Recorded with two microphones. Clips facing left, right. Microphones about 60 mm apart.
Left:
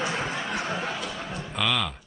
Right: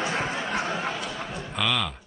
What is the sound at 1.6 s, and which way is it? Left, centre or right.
Music, centre.